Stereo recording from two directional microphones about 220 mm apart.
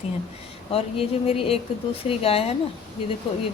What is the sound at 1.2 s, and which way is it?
A woman's voice, 25° left (ahead or behind).